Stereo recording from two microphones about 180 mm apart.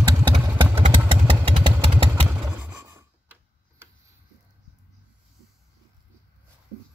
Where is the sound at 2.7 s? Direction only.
15° right (ahead or behind).